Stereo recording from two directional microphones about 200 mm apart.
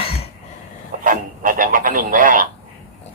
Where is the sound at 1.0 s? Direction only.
45° right (ahead or behind).